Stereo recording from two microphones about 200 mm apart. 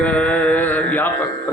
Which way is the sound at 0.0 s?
5° left (ahead or behind).